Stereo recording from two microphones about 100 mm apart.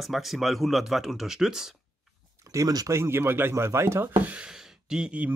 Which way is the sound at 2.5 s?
35° right (ahead or behind).